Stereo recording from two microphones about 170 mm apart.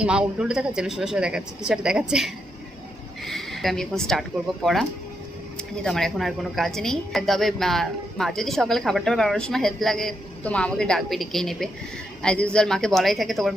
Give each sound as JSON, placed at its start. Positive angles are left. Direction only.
{"t": 0.0, "sound": "a woman's voice", "side_deg": -5}